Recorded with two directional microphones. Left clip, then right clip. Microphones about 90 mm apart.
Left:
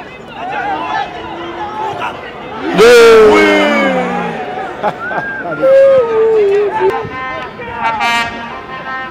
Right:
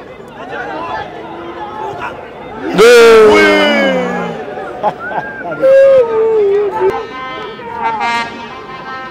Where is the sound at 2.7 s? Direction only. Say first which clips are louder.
Even; 20° right (ahead or behind).